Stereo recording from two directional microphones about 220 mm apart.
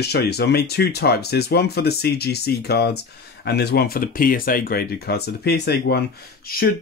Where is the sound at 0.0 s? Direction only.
45° left (ahead or behind).